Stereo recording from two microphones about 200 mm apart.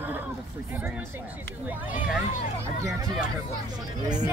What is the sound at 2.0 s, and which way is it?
Speech, 40° left (ahead or behind).